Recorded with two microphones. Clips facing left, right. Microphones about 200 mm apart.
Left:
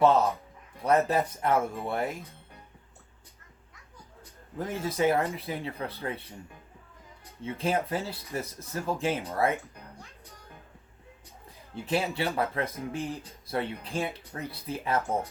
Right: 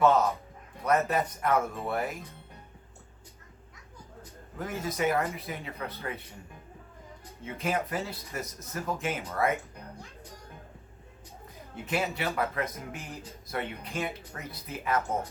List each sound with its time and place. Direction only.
0.0 s speech: 30° left (ahead or behind)
4.5 s speech: 30° left (ahead or behind)
7.4 s speech: 30° left (ahead or behind)
11.7 s speech: 30° left (ahead or behind)